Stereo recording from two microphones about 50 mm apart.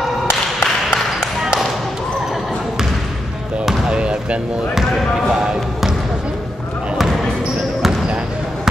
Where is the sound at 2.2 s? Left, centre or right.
Centre.